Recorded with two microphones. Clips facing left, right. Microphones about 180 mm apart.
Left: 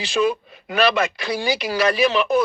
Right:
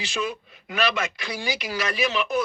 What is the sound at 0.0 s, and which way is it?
Speech, 35° left (ahead or behind).